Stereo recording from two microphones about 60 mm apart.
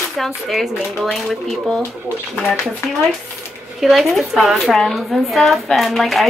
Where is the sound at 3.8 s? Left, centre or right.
Centre.